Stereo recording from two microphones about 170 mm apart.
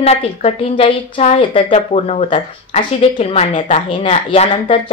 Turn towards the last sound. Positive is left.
turn(degrees=30)  # may be behind; listen again after turning